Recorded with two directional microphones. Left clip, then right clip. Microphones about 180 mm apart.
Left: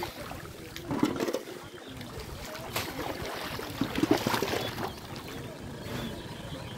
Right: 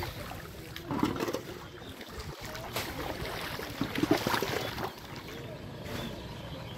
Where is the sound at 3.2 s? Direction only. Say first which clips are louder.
Left 1 dB; 15° right (ahead or behind).